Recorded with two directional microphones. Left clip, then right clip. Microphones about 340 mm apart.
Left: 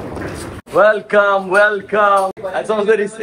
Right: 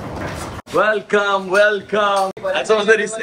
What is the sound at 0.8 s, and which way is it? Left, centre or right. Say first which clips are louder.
A man's voice: left 5 dB; centre.